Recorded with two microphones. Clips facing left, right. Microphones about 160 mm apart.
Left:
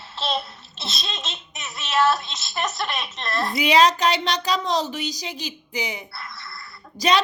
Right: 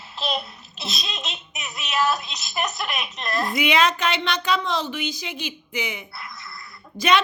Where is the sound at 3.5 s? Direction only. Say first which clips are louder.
Left 4 dB; 35° left (ahead or behind).